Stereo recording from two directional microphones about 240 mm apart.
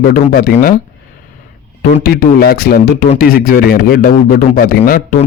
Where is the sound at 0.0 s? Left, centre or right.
Left.